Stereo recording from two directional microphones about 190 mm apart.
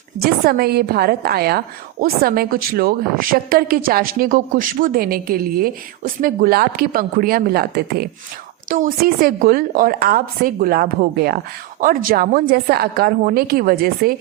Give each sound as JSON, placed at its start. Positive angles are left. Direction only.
{"t": 0.2, "sound": "a woman's voice", "side_deg": -50}